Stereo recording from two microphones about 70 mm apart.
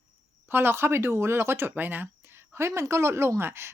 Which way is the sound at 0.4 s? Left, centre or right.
Right.